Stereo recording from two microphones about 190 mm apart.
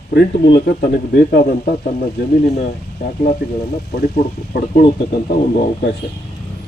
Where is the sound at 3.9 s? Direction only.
55° left (ahead or behind).